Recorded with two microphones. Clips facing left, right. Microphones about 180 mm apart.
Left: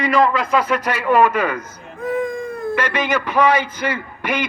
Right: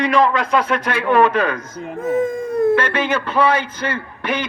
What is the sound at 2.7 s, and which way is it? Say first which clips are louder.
A man's voice: right 2 dB; 10° left (ahead or behind).